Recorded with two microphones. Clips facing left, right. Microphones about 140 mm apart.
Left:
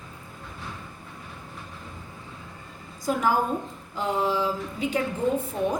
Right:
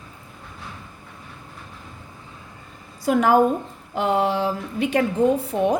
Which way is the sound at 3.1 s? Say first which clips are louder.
Right 7 dB; 75° right (ahead or behind).